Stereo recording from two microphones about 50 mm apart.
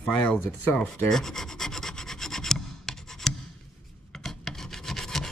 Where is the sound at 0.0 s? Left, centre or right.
Left.